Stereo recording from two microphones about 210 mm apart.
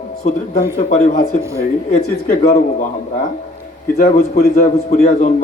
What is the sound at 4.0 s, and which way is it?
Speech, 35° left (ahead or behind).